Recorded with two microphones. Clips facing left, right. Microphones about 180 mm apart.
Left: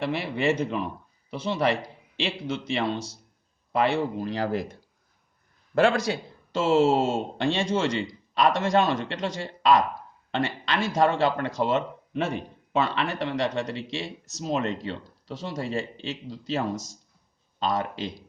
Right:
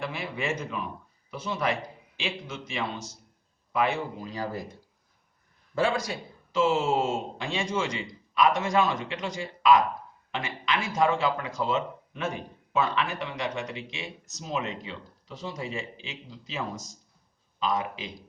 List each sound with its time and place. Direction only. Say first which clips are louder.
0.0 s a man's voice: left 7 dB; 65° left (ahead or behind)